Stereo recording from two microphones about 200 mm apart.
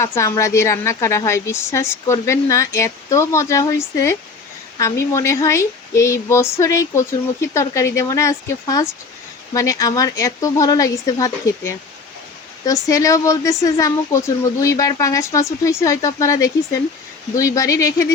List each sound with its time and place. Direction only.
0.0 s speech: 15° left (ahead or behind)